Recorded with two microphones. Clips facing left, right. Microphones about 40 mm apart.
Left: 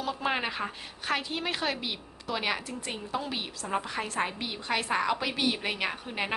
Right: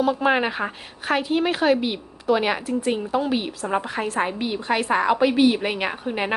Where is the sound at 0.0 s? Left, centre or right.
Centre.